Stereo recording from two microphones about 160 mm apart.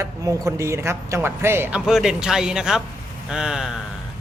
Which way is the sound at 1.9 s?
5° right (ahead or behind).